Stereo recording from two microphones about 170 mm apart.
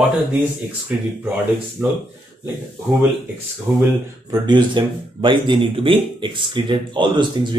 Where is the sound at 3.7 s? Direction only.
15° right (ahead or behind).